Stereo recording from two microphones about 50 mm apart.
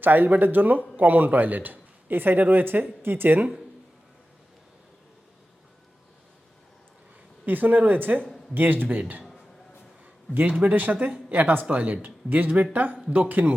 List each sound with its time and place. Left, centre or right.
0.0 s a man's voice: right
7.4 s a man's voice: right
10.6 s a man's voice: right